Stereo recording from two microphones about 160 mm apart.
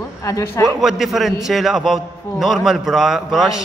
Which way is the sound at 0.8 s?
Centre (ahead or behind).